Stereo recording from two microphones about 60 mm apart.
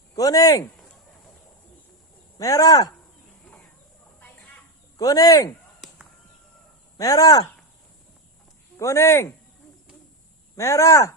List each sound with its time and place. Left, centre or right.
0.2 s speech: left
2.4 s speech: left
4.9 s speech: left
6.9 s speech: left
8.8 s speech: left
10.6 s speech: left